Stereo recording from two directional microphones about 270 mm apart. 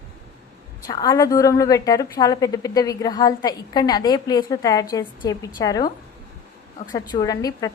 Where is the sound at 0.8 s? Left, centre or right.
Centre.